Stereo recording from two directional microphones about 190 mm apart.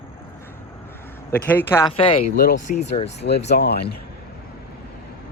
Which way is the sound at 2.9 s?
35° left (ahead or behind).